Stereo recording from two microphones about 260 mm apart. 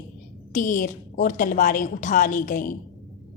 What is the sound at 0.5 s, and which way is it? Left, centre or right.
A woman's voice, left.